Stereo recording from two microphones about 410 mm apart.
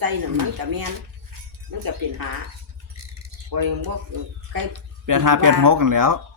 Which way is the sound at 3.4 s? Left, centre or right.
Right.